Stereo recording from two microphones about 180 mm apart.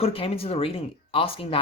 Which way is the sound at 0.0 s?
30° left (ahead or behind).